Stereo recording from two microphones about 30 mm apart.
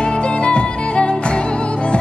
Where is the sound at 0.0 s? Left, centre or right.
Left.